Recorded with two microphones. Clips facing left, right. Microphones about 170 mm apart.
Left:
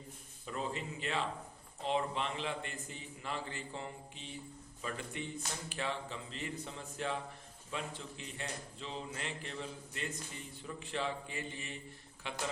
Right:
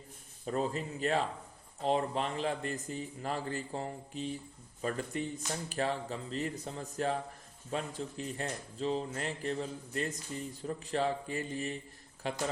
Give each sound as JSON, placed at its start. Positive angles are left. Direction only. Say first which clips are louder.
{"t": 0.4, "sound": "speech", "louder": "right 6 dB", "side_deg": -40}